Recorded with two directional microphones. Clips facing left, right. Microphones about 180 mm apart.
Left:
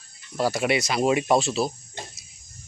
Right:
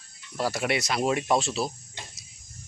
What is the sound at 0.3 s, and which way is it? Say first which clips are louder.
Speech: left 4 dB; centre (ahead or behind).